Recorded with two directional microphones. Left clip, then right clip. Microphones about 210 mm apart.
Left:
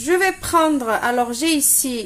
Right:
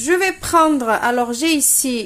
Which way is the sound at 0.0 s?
10° right (ahead or behind).